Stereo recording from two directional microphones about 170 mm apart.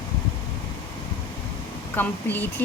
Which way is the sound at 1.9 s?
10° left (ahead or behind).